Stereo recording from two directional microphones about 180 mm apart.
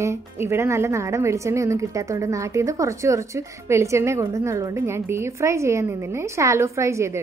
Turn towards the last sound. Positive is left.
turn(degrees=-15)  # may be behind; listen again after turning